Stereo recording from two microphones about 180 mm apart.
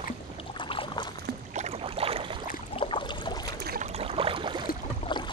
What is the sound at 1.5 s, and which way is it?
Boat, 35° right (ahead or behind).